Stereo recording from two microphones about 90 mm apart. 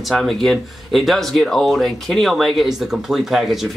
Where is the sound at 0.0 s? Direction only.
Centre (ahead or behind).